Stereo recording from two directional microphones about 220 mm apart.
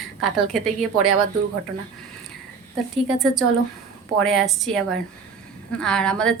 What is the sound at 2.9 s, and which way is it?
A woman's voice, centre (ahead or behind).